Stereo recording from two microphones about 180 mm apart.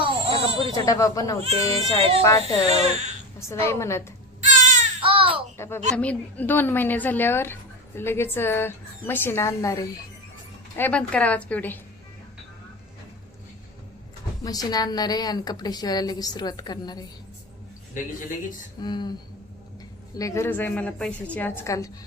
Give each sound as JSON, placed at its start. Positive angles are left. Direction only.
{"t": 0.0, "sound": "baby cry", "side_deg": -30}
{"t": 0.8, "sound": "a woman's voice", "side_deg": 20}
{"t": 1.4, "sound": "speech", "side_deg": -35}
{"t": 2.2, "sound": "a woman's voice", "side_deg": 15}
{"t": 4.4, "sound": "baby cry", "side_deg": -45}
{"t": 5.0, "sound": "a sound", "side_deg": -30}
{"t": 5.5, "sound": "a woman's voice", "side_deg": 15}
{"t": 10.8, "sound": "a woman's voice", "side_deg": 10}
{"t": 14.4, "sound": "a woman's voice", "side_deg": 20}
{"t": 18.8, "sound": "a woman's voice", "side_deg": 25}
{"t": 20.1, "sound": "a woman's voice", "side_deg": 15}